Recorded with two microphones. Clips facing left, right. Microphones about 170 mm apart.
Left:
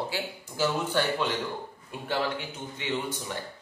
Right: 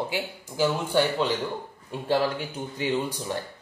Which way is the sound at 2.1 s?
35° right (ahead or behind).